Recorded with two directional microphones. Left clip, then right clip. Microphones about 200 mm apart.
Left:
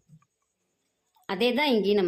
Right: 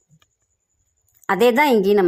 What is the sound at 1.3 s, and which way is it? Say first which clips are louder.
Speech: right 10 dB; 30° right (ahead or behind).